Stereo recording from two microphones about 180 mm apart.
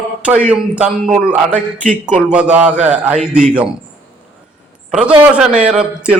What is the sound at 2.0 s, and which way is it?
A man's voice, 5° right (ahead or behind).